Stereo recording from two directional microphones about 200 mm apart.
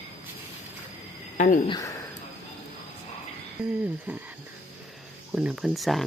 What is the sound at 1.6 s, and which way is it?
Speech, 20° left (ahead or behind).